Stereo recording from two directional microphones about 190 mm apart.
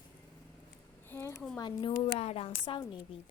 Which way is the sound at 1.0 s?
10° left (ahead or behind).